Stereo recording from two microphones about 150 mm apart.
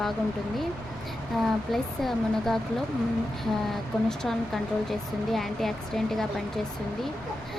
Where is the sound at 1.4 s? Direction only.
Centre (ahead or behind).